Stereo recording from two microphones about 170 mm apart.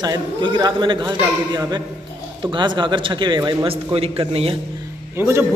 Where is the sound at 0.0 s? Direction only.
25° right (ahead or behind).